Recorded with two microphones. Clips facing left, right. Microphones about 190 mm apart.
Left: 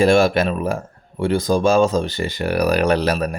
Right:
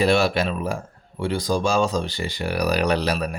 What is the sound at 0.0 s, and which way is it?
A man's voice, 50° left (ahead or behind).